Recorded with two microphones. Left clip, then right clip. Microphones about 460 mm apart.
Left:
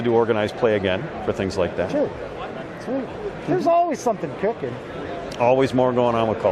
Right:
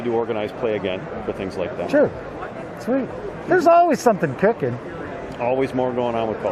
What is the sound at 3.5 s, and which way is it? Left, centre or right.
Speech, right.